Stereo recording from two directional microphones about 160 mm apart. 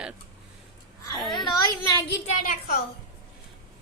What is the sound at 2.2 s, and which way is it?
Speech, 55° left (ahead or behind).